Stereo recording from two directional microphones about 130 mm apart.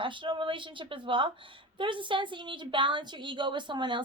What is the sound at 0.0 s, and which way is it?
A woman's voice, 40° right (ahead or behind).